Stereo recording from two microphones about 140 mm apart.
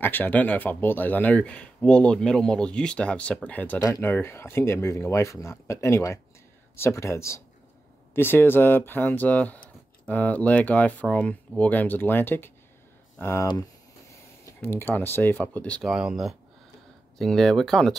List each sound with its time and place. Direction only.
0.0 s speech: 15° left (ahead or behind)
15.9 s speech: 5° right (ahead or behind)